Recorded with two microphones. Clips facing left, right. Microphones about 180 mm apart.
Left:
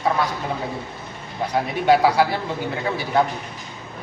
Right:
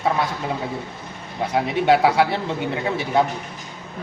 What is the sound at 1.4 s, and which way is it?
Speech, 25° right (ahead or behind).